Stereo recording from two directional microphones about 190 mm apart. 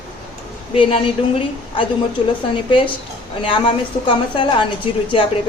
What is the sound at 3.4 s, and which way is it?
A woman's voice, 25° left (ahead or behind).